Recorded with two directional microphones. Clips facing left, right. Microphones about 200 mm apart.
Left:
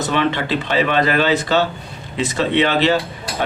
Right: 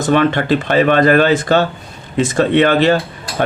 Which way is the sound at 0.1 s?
50° right (ahead or behind).